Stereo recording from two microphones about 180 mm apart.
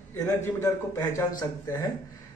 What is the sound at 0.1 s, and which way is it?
A man's voice, 15° left (ahead or behind).